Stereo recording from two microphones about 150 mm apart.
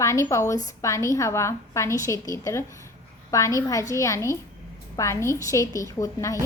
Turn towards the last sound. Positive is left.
turn(degrees=20)  # may be behind; listen again after turning